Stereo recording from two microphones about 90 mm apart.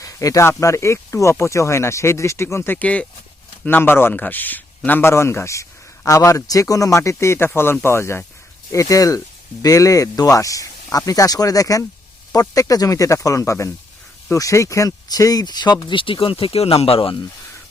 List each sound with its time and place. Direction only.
0.0 s speech: 40° left (ahead or behind); by 16.1 s 65° left (ahead or behind)
16.2 s speech: 85° left